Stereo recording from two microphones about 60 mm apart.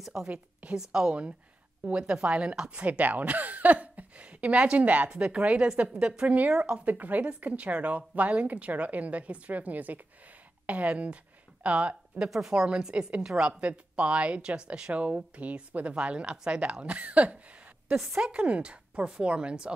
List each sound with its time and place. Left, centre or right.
0.0 s speech: centre
0.3 s speech: right
0.7 s speech: centre
2.8 s speech: right
6.5 s speech: centre
6.9 s speech: right
12.3 s speech: centre
17.9 s speech: centre